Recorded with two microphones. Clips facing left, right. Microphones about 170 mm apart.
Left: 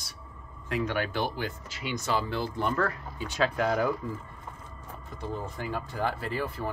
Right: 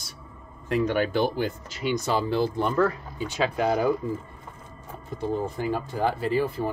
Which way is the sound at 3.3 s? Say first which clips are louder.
Right 2 dB; 20° right (ahead or behind).